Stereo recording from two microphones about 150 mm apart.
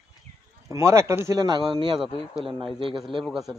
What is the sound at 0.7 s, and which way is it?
Speech, 20° right (ahead or behind).